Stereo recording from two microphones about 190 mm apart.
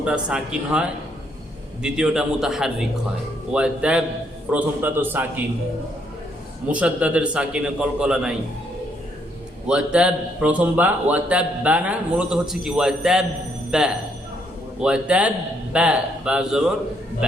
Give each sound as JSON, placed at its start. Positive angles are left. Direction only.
{"t": 0.0, "sound": "a man's voice", "side_deg": -5}
{"t": 6.7, "sound": "a man's voice", "side_deg": -5}
{"t": 9.6, "sound": "a man's voice", "side_deg": -5}